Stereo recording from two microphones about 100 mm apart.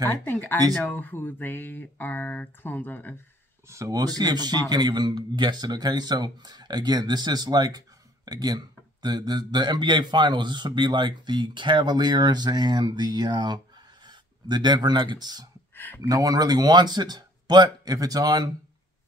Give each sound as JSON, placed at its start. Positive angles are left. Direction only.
{"t": 0.2, "sound": "speech", "side_deg": 20}
{"t": 3.6, "sound": "speech", "side_deg": -30}
{"t": 15.7, "sound": "a sound", "side_deg": 20}
{"t": 16.0, "sound": "speech", "side_deg": -35}